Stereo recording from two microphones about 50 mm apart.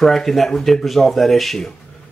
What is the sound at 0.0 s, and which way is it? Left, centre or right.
Speech, centre.